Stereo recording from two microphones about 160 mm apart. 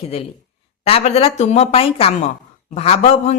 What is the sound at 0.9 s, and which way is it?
A woman's voice, 40° left (ahead or behind).